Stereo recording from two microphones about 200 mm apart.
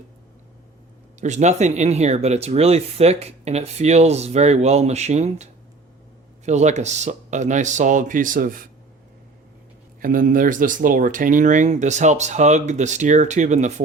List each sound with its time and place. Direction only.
1.2 s speech: 35° right (ahead or behind)
10.0 s speech: 45° right (ahead or behind)